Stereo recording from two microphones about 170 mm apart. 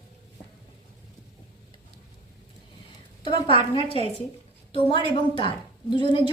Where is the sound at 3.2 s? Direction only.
30° left (ahead or behind).